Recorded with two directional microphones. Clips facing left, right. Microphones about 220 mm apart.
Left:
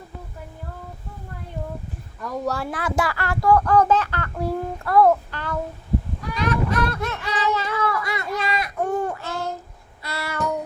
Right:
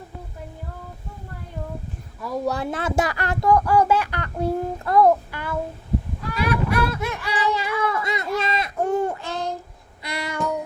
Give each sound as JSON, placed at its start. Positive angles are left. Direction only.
{"t": 2.2, "sound": "speech", "side_deg": -10}
{"t": 6.3, "sound": "a sound", "side_deg": -10}
{"t": 10.0, "sound": "child singing", "side_deg": -15}